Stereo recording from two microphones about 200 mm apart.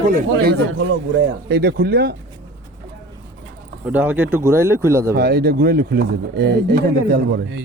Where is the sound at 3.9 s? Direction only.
10° right (ahead or behind).